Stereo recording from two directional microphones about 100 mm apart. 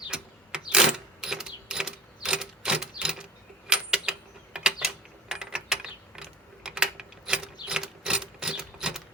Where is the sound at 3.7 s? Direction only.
10° right (ahead or behind).